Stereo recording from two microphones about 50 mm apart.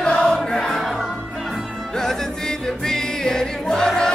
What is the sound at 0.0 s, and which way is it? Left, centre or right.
Music, centre.